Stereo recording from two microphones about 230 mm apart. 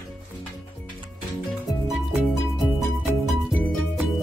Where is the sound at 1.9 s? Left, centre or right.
Centre.